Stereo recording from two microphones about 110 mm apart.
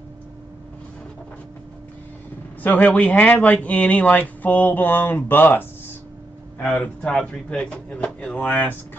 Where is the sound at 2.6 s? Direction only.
15° left (ahead or behind).